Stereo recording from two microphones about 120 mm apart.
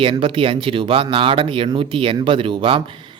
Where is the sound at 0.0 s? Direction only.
45° right (ahead or behind).